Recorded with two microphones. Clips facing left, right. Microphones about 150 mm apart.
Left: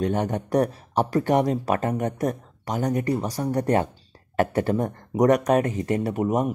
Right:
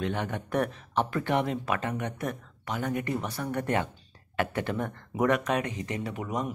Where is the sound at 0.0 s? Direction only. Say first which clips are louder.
Left 7 dB; 40° left (ahead or behind).